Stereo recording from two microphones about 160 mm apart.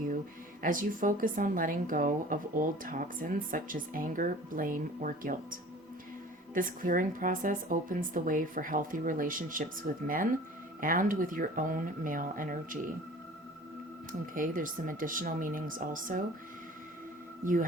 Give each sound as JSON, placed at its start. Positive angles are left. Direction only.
{"t": 0.6, "sound": "a woman's voice", "side_deg": -60}
{"t": 14.1, "sound": "a woman's voice", "side_deg": -60}
{"t": 17.4, "sound": "a woman's voice", "side_deg": -55}